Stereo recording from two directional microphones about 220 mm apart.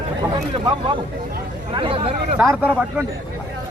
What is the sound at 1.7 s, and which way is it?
Speech, 25° right (ahead or behind).